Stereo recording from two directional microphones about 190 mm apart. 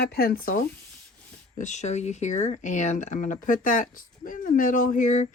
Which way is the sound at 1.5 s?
40° left (ahead or behind).